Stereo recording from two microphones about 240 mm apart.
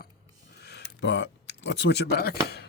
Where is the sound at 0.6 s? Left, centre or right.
Left.